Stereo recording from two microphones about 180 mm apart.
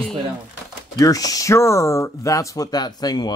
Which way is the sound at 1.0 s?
20° left (ahead or behind).